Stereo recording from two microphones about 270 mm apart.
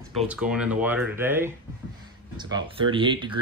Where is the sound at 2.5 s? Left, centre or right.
Centre.